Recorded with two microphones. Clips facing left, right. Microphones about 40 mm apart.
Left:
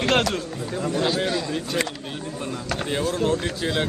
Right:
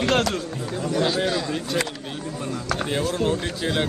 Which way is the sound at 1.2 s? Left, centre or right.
Right.